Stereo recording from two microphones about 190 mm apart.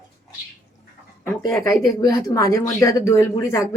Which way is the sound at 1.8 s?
20° left (ahead or behind).